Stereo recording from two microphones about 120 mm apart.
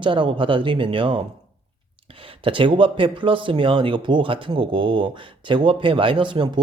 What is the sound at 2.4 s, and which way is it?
Speech, 45° right (ahead or behind).